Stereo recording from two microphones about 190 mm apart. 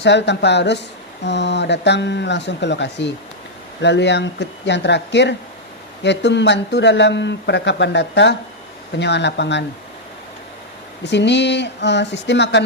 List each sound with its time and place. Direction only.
0.0 s speech: 65° left (ahead or behind)
11.0 s speech: 65° left (ahead or behind)